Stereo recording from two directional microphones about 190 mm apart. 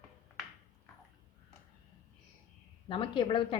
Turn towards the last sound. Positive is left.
turn(degrees=25)  # may be behind; listen again after turning